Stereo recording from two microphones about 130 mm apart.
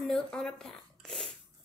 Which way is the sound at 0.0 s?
5° left (ahead or behind).